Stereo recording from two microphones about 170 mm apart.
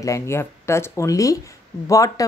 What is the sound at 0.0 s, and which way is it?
Speech, 15° left (ahead or behind).